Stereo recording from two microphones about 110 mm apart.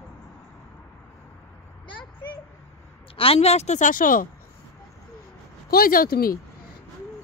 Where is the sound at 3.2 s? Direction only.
65° left (ahead or behind); by 3.8 s 85° left.